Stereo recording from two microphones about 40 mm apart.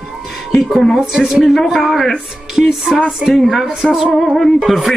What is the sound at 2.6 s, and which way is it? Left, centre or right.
A man's voice, centre.